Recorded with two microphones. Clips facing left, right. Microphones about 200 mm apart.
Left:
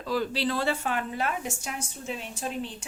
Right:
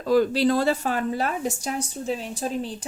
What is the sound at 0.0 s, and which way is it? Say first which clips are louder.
Speech: right 9 dB; 45° right (ahead or behind).